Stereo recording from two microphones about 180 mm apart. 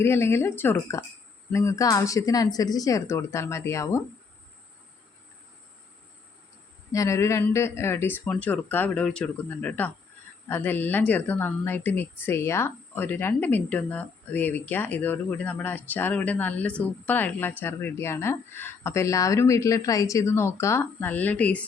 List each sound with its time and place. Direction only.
0.0 s speech: 15° left (ahead or behind)
6.9 s speech: 15° left (ahead or behind)